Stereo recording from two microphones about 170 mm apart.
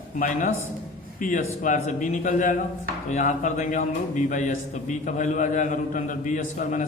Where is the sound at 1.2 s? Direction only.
55° left (ahead or behind).